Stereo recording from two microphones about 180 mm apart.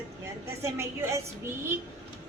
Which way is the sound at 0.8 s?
15° right (ahead or behind).